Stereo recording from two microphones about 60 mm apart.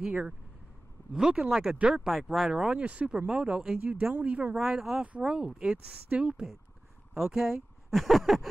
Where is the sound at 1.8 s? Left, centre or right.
Centre.